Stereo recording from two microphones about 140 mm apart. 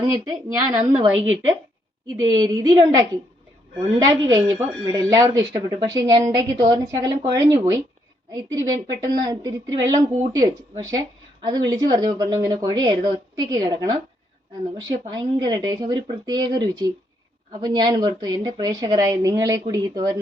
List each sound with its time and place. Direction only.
0.0 s speech: 25° right (ahead or behind)
2.1 s speech: 25° right (ahead or behind)
4.1 s speech: 30° right (ahead or behind)